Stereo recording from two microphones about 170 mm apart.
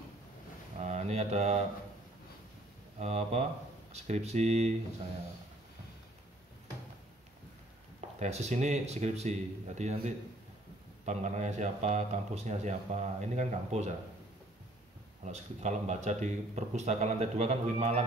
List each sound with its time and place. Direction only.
0.7 s a sound: 40° right (ahead or behind)
3.0 s speech: 40° right (ahead or behind)
8.2 s speech: 40° right (ahead or behind)
15.2 s speech: 45° right (ahead or behind)